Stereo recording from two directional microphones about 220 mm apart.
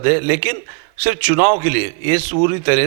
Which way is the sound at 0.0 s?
15° right (ahead or behind).